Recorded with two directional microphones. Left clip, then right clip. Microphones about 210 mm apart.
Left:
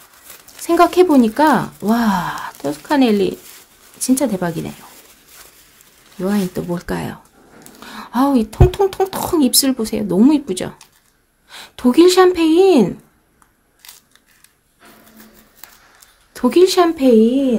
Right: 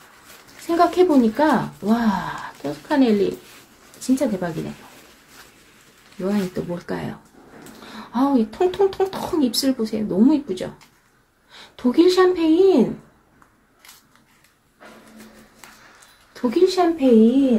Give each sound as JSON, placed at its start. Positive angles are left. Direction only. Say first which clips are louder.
{"t": 0.7, "sound": "speech", "louder": "left 5 dB", "side_deg": 35}
{"t": 6.2, "sound": "speech", "louder": "left 4 dB", "side_deg": 35}
{"t": 16.3, "sound": "speech", "louder": "left 6 dB", "side_deg": 45}